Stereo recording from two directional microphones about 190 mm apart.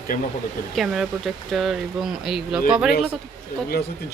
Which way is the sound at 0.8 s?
Centre (ahead or behind).